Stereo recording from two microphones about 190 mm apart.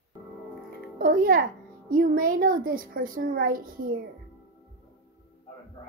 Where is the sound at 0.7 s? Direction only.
50° right (ahead or behind).